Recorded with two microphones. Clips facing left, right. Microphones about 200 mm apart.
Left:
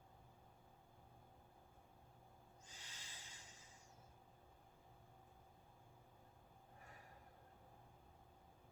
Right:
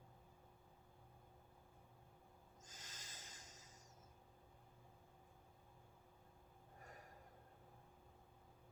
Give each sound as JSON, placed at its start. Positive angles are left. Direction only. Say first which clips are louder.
{"t": 2.6, "sound": "snort", "louder": "right 2 dB", "side_deg": -45}